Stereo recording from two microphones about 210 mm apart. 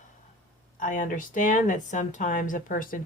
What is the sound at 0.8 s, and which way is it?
Speech, 40° left (ahead or behind).